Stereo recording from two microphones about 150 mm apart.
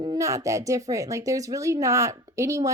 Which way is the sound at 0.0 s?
25° right (ahead or behind).